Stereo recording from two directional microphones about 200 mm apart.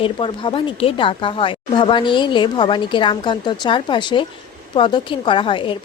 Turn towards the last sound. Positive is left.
turn(degrees=25)  # may be behind; listen again after turning